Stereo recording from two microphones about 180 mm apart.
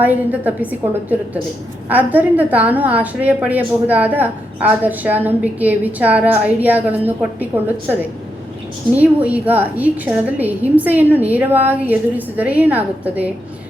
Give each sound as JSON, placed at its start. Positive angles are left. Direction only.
{"t": 0.0, "sound": "a woman's voice", "side_deg": -10}
{"t": 9.0, "sound": "a woman's voice", "side_deg": -10}